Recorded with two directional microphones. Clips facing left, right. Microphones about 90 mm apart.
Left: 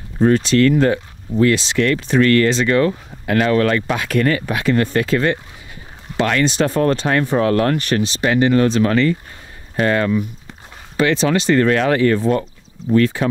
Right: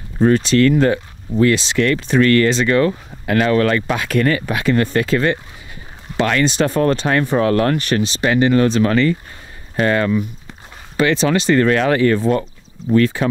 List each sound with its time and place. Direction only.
0.2 s speech: 25° right (ahead or behind)